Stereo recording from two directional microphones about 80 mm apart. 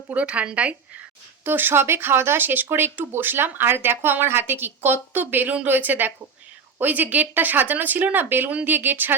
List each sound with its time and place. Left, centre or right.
0.1 s speech: centre
1.5 s speech: right